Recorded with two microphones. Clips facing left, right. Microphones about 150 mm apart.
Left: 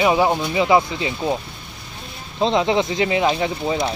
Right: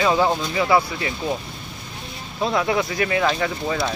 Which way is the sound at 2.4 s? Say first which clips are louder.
Left 3 dB; 25° left (ahead or behind).